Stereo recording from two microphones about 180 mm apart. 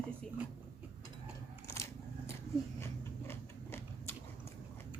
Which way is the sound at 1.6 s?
15° left (ahead or behind).